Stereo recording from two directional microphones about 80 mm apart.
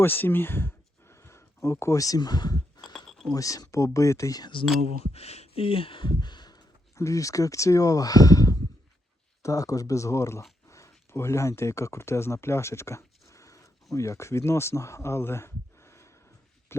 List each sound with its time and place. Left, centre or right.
0.0 s speech: left
3.1 s a sound: centre
3.3 s speech: left
5.9 s speech: left
6.9 s speech: left